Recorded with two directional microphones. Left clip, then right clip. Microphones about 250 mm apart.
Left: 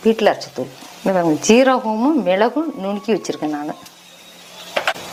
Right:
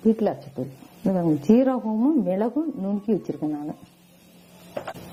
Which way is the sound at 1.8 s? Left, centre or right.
Left.